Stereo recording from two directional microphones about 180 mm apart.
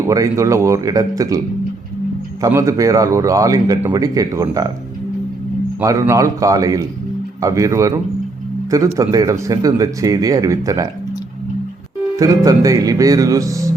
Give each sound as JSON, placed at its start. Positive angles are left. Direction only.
{"t": 0.0, "sound": "a man's voice", "side_deg": -15}
{"t": 2.4, "sound": "a man's voice", "side_deg": -15}
{"t": 5.8, "sound": "a man's voice", "side_deg": -20}
{"t": 12.1, "sound": "speech", "side_deg": -20}